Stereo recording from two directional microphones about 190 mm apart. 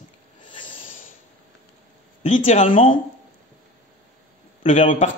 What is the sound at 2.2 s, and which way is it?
Speech, 40° left (ahead or behind).